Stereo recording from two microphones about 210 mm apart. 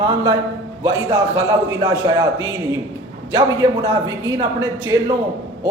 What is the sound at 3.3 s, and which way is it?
A man's voice, 20° right (ahead or behind).